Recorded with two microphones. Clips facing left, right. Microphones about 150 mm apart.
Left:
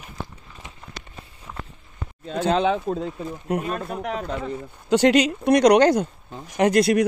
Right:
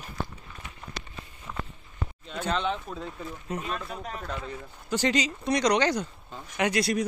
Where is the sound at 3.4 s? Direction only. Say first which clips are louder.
Left 8 dB; 55° left (ahead or behind).